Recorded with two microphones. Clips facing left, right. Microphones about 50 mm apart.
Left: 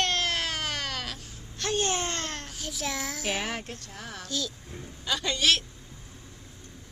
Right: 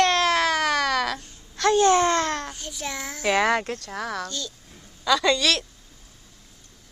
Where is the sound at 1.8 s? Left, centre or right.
Right.